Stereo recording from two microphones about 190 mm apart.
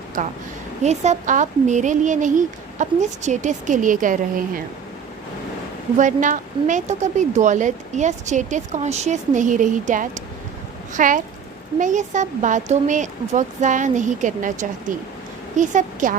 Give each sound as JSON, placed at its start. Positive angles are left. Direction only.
{"t": 0.2, "sound": "a woman's voice", "side_deg": -40}
{"t": 6.0, "sound": "a woman's voice", "side_deg": -40}